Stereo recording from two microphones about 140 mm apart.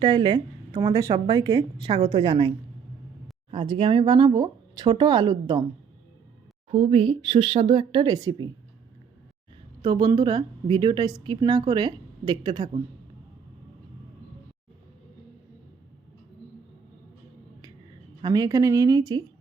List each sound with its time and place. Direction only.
0.0 s a woman's voice: 35° right (ahead or behind)
3.5 s a woman's voice: 40° right (ahead or behind)
6.7 s a woman's voice: 45° right (ahead or behind); by 8.4 s 30° right (ahead or behind)
9.8 s a woman's voice: 30° right (ahead or behind)
18.2 s speech: 30° right (ahead or behind)